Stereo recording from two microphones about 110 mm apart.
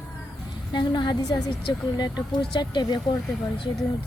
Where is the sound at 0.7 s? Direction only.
40° left (ahead or behind).